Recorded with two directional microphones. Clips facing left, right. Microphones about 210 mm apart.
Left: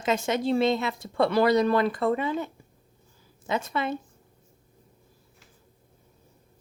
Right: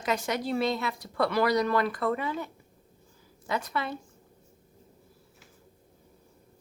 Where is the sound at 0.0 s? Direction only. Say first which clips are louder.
Left 4 dB; 25° left (ahead or behind).